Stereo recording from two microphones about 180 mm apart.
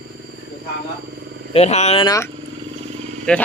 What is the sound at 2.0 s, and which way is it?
Speech, 20° left (ahead or behind).